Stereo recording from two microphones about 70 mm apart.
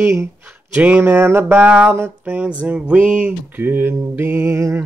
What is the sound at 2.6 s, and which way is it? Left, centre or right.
Speech, centre.